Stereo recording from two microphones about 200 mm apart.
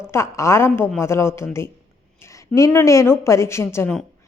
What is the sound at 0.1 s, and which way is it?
A woman's voice, 15° left (ahead or behind).